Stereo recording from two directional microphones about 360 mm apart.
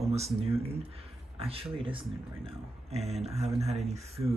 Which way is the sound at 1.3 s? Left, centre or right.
Centre.